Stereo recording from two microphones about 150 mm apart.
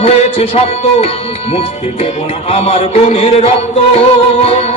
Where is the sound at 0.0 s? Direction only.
45° left (ahead or behind).